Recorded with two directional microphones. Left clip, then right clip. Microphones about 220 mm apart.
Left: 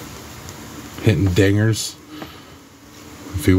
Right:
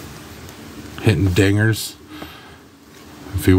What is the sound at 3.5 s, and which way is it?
Speech, 20° right (ahead or behind).